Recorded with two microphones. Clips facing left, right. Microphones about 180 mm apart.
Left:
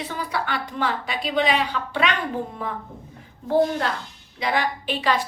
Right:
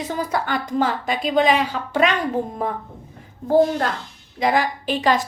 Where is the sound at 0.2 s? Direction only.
45° right (ahead or behind).